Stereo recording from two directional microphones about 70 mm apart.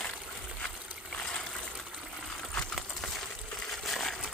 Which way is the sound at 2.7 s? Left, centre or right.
Centre.